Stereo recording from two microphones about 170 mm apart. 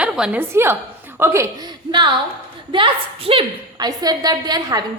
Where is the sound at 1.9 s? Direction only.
30° right (ahead or behind).